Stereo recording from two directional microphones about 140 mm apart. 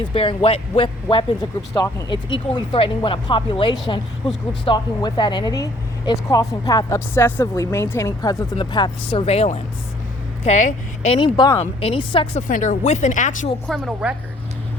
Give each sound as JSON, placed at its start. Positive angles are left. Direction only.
{"t": 0.0, "sound": "speech", "side_deg": 40}
{"t": 1.1, "sound": "speech", "side_deg": 30}
{"t": 8.5, "sound": "speech", "side_deg": 35}
{"t": 10.4, "sound": "speech", "side_deg": 60}
{"t": 11.1, "sound": "speech", "side_deg": 35}
{"t": 12.4, "sound": "speech", "side_deg": 65}
{"t": 13.7, "sound": "a woman's voice", "side_deg": 0}